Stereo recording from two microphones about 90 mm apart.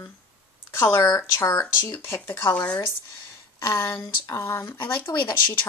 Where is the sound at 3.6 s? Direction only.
30° left (ahead or behind).